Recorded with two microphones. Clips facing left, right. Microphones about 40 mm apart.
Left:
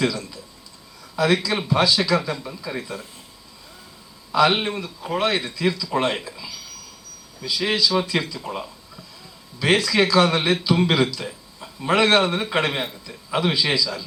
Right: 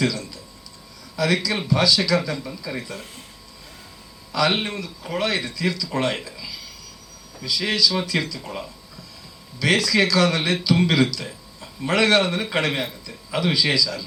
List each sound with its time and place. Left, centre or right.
0.0 s a sound: centre
1.1 s a man's voice: left
4.3 s a man's voice: left
4.5 s a man's voice: centre
8.4 s a man's voice: centre
11.3 s a sound: centre
11.9 s a man's voice: centre
12.4 s speech: centre
12.6 s a man's voice: left